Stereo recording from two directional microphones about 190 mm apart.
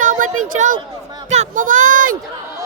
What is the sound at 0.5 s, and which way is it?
Speech, 45° right (ahead or behind).